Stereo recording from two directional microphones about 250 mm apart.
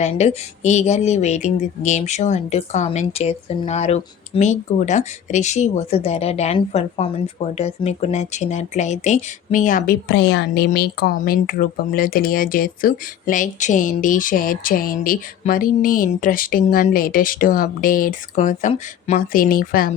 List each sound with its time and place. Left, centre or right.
0.0 s speech: left